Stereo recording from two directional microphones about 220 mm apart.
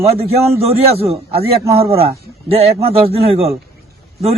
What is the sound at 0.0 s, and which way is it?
A man's voice, 25° right (ahead or behind).